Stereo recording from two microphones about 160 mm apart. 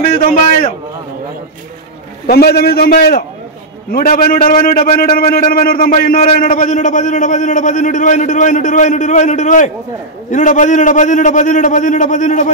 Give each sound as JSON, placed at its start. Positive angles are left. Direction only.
{"t": 2.2, "sound": "a man's voice", "side_deg": 80}